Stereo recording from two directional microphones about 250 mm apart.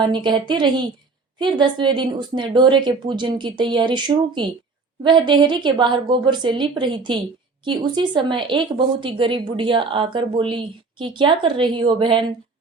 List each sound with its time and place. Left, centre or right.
0.0 s speech: centre